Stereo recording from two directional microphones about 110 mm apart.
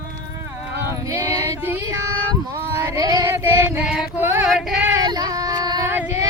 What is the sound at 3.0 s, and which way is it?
Female singing, 35° right (ahead or behind).